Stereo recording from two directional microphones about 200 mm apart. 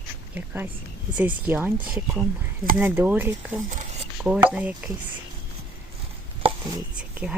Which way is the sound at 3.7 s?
35° right (ahead or behind).